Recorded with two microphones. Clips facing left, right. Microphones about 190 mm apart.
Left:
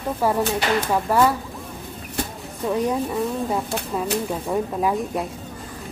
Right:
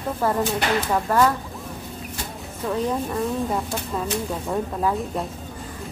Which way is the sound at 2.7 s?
5° left (ahead or behind).